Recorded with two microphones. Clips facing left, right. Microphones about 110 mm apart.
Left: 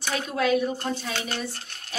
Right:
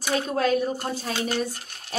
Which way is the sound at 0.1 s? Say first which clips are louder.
Right 1 dB; 40° right (ahead or behind).